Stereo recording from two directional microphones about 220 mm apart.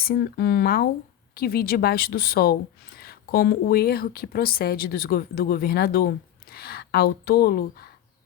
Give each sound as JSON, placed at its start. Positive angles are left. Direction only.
{"t": 0.0, "sound": "a woman's voice", "side_deg": 45}